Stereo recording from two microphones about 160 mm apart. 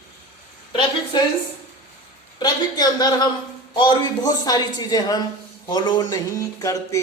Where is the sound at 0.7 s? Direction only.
30° left (ahead or behind).